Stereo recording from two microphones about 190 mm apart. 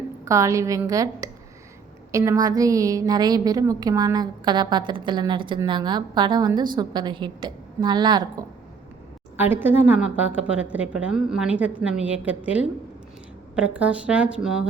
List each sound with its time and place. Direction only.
0.3 s a woman's voice: 15° right (ahead or behind)
9.4 s a woman's voice: 10° right (ahead or behind)
13.7 s a woman's voice: 5° right (ahead or behind)